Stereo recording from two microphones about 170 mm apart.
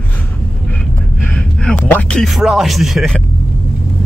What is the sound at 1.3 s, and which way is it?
Speech, 5° left (ahead or behind).